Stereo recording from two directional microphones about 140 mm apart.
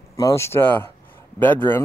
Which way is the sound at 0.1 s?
20° left (ahead or behind).